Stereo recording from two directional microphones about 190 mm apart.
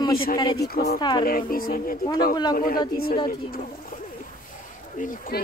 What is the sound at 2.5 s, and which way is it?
Speech, 50° left (ahead or behind).